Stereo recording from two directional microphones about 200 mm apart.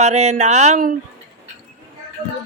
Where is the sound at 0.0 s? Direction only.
35° right (ahead or behind).